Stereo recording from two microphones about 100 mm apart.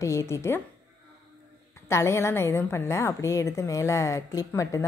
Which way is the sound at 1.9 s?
25° left (ahead or behind).